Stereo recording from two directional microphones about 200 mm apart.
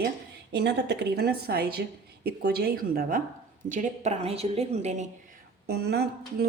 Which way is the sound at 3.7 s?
35° right (ahead or behind).